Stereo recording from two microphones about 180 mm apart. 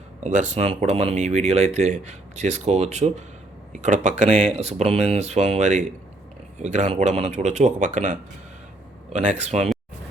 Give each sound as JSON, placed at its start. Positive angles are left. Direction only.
{"t": 0.2, "sound": "speech", "side_deg": -45}